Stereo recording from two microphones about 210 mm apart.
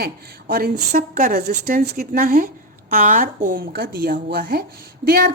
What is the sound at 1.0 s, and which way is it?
A woman's voice, 35° right (ahead or behind).